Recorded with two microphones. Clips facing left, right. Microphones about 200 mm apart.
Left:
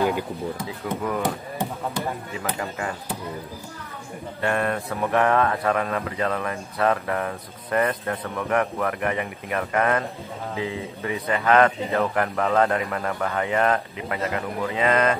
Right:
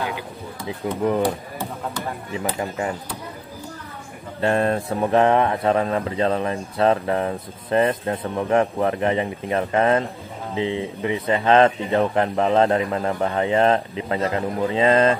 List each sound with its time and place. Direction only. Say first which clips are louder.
0.8 s speech: right 6 dB; 25° right (ahead or behind)
2.6 s speech: right 4 dB; 20° right (ahead or behind)
4.4 s speech: right 4 dB; 30° right (ahead or behind)